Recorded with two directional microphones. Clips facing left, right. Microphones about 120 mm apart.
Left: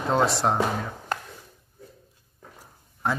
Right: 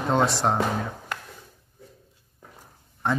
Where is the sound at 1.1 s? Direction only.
40° left (ahead or behind).